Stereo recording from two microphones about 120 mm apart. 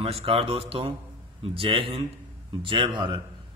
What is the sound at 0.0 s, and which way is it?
A man's voice, 50° right (ahead or behind).